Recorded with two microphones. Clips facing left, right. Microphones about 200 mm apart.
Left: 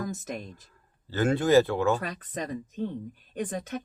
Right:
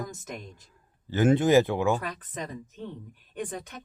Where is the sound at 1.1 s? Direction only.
20° right (ahead or behind).